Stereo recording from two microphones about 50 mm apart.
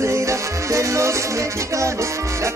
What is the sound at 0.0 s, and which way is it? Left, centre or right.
Music, right.